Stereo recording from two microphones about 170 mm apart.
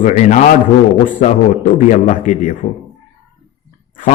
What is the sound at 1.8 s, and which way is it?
Speech, 45° left (ahead or behind).